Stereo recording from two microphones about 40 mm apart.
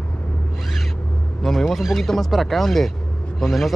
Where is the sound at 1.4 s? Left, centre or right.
Centre.